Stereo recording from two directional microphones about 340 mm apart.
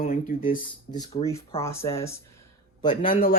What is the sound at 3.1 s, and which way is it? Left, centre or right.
Speech, left.